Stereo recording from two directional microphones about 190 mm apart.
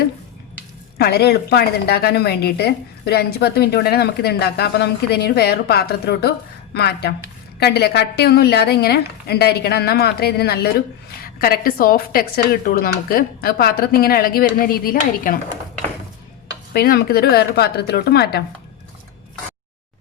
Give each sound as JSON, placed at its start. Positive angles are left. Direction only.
{"t": 0.9, "sound": "a woman's voice", "side_deg": 55}
{"t": 16.7, "sound": "a woman's voice", "side_deg": 55}